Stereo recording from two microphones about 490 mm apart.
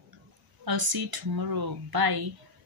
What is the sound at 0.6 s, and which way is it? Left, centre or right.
Speech, right.